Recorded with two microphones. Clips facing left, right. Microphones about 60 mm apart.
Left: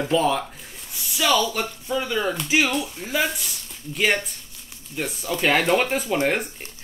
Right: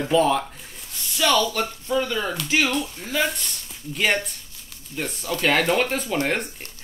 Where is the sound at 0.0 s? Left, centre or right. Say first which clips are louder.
Right 1 dB; centre.